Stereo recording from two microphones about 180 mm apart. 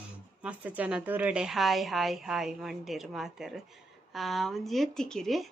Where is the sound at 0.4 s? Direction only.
10° right (ahead or behind).